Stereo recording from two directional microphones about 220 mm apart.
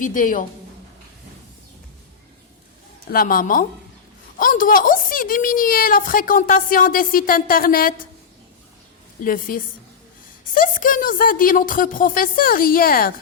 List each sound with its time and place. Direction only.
0.0 s a woman's voice: 35° left (ahead or behind)
3.1 s a woman's voice: 40° left (ahead or behind)
9.2 s a woman's voice: 40° left (ahead or behind)